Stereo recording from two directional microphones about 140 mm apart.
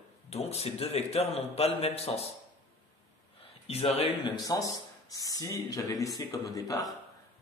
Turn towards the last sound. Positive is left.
turn(degrees=25)  # may be behind; listen again after turning